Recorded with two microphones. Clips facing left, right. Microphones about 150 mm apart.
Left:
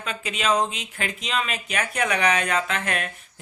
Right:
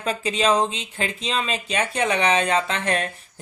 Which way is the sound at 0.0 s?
35° right (ahead or behind).